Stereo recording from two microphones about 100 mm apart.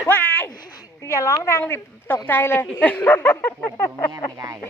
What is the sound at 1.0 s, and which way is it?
A woman's voice, 30° left (ahead or behind).